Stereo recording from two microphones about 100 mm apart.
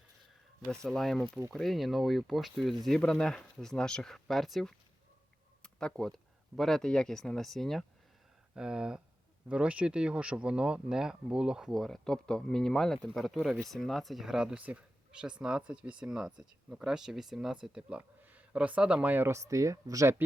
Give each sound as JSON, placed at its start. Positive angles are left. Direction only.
{"t": 0.9, "sound": "speech", "side_deg": 5}
{"t": 8.5, "sound": "speech", "side_deg": -10}
{"t": 19.1, "sound": "speech", "side_deg": -25}